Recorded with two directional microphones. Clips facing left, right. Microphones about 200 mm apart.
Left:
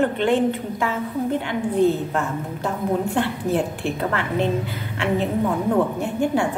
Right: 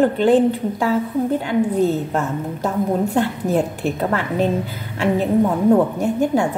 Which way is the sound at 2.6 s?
40° right (ahead or behind).